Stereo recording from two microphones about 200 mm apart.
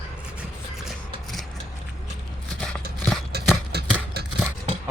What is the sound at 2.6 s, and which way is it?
Horse, 5° left (ahead or behind).